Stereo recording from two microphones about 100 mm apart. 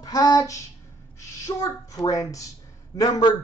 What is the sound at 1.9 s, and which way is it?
Speech, 35° left (ahead or behind).